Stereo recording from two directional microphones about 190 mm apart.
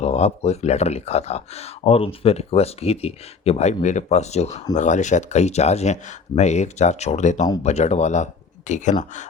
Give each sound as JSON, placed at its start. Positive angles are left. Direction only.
{"t": 0.0, "sound": "speech", "side_deg": 35}